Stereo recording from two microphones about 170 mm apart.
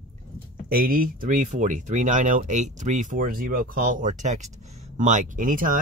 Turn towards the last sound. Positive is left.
turn(degrees=-50)  # may be behind; listen again after turning